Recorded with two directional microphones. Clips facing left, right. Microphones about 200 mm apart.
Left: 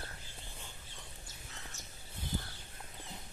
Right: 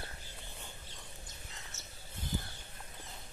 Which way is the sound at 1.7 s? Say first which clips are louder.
Even; 15° left (ahead or behind).